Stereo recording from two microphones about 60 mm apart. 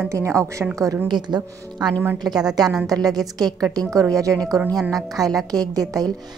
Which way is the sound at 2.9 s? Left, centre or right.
Right.